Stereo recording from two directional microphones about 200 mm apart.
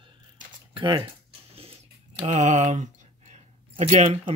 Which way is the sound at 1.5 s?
30° right (ahead or behind).